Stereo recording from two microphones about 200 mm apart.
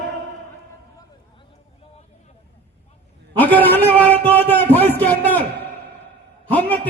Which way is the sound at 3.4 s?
10° left (ahead or behind).